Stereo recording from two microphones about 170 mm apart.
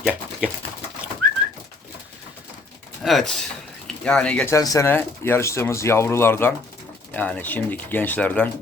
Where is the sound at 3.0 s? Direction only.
Centre (ahead or behind).